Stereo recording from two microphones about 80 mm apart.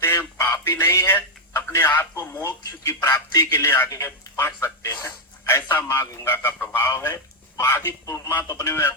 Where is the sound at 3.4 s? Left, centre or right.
Left.